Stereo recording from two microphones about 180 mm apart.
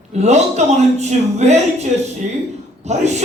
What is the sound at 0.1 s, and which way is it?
A woman's voice, 40° right (ahead or behind).